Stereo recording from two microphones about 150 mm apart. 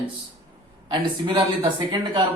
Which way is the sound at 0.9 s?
30° right (ahead or behind).